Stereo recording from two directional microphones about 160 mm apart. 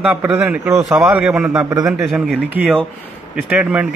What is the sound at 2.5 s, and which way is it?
A man's voice, 10° right (ahead or behind).